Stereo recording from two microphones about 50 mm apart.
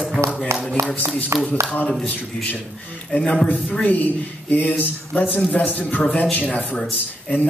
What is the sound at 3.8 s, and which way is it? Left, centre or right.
Speech, left.